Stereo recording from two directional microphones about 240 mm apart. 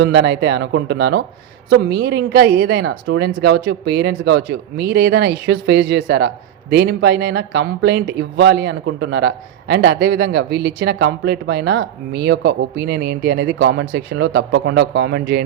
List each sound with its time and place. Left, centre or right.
0.0 s a woman's voice: right